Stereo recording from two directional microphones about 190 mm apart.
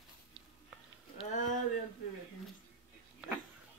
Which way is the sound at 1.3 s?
40° left (ahead or behind).